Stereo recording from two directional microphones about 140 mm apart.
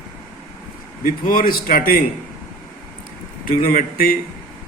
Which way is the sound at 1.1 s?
85° left.